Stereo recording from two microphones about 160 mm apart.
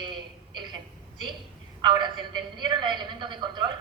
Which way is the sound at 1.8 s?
30° right (ahead or behind).